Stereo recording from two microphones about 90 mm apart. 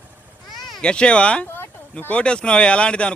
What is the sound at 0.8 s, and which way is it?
Speech, 10° left (ahead or behind).